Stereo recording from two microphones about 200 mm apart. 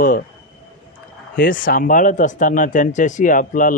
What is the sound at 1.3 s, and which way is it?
Speech, 45° left (ahead or behind).